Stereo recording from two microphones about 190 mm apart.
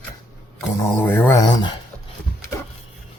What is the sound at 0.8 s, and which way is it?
Speech, 10° left (ahead or behind).